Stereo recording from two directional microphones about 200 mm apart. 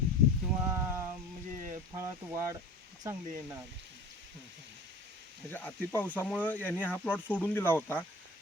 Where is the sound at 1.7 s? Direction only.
20° right (ahead or behind).